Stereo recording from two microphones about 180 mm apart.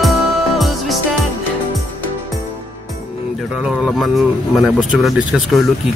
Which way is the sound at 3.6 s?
Centre (ahead or behind).